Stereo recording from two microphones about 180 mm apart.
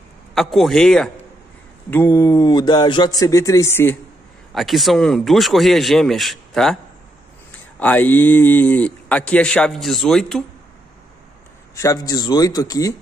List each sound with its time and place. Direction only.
0.3 s speech: centre (ahead or behind)
4.6 s speech: centre (ahead or behind)
7.8 s speech: 10° left (ahead or behind)
11.7 s a man's voice: 20° left (ahead or behind)